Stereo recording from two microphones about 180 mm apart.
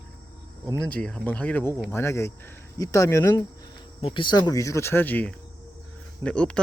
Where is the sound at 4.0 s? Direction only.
25° left (ahead or behind).